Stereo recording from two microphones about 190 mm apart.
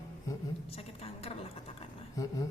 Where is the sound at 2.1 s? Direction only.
20° left (ahead or behind).